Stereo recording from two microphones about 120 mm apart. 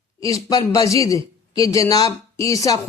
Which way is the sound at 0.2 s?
30° left (ahead or behind).